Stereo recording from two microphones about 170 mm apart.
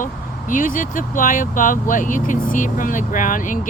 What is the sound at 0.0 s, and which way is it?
Speech, 50° left (ahead or behind).